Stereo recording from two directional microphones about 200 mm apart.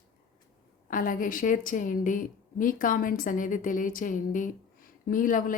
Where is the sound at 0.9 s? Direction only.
45° left (ahead or behind).